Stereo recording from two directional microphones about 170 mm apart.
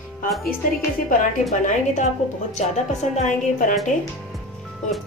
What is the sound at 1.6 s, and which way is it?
A woman's voice, 45° left (ahead or behind).